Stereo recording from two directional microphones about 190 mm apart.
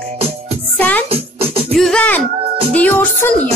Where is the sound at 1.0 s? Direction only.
30° right (ahead or behind).